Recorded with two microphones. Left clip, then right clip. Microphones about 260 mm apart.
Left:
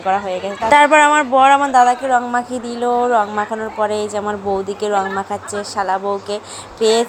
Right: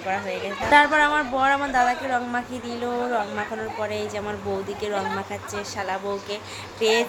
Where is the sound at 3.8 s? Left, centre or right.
Left.